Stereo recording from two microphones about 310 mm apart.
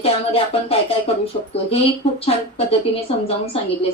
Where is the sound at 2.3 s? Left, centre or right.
Centre.